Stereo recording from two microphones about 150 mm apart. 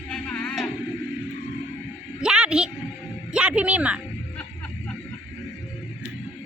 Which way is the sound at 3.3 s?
5° right (ahead or behind).